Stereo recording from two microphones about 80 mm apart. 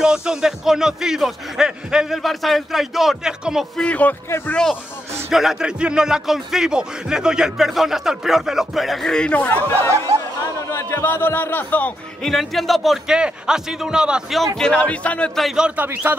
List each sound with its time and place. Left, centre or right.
0.0 s speech: centre
3.7 s a man's voice: centre
5.3 s speech: centre
10.7 s speech: left
12.2 s speech: centre
14.6 s a man's voice: centre
15.5 s speech: centre
15.8 s a man's voice: right